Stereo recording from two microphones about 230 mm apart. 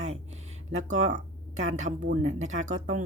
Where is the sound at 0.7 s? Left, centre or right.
Right.